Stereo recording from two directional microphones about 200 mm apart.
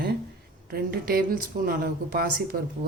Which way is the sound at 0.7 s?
50° right (ahead or behind).